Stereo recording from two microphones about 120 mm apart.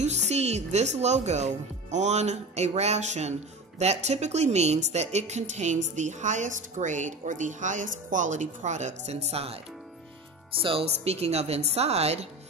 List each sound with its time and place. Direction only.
0.3 s a woman's voice: 65° right (ahead or behind)
10.6 s speech: 50° right (ahead or behind)